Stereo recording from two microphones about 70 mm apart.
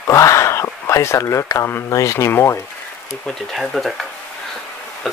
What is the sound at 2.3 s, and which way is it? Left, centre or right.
Speech, left.